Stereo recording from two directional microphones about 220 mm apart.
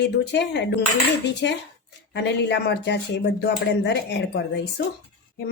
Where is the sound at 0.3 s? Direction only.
50° left (ahead or behind).